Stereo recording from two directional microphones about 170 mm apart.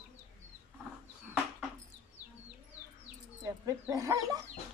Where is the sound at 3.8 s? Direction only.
20° right (ahead or behind).